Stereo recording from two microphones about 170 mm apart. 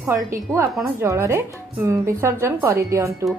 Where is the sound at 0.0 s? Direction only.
15° right (ahead or behind).